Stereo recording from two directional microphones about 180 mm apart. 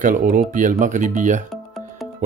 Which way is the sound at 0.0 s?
45° right (ahead or behind).